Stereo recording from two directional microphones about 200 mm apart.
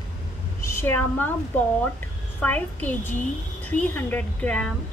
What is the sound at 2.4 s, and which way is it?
A woman's voice, 10° left (ahead or behind).